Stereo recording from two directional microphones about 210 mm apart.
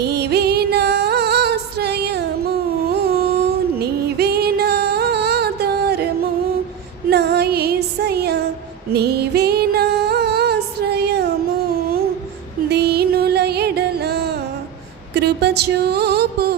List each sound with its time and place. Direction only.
0.0 s music: 50° right (ahead or behind)
7.1 s music: 50° right (ahead or behind)
8.9 s female singing: 50° right (ahead or behind)
12.7 s music: 50° right (ahead or behind)